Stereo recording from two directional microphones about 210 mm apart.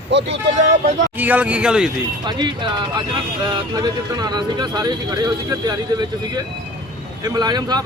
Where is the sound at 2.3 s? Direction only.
20° right (ahead or behind).